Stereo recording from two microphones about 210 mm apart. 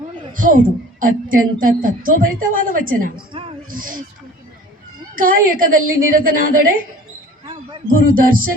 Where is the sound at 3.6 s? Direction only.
40° right (ahead or behind).